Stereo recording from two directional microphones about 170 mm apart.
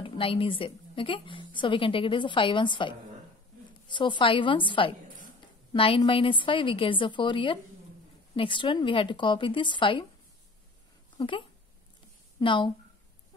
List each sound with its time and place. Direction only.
0.0 s a woman's voice: 30° left (ahead or behind)
3.9 s a woman's voice: 30° left (ahead or behind)
11.1 s a woman's voice: 30° left (ahead or behind)